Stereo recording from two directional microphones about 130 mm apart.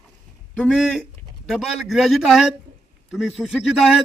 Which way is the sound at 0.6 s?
5° left (ahead or behind).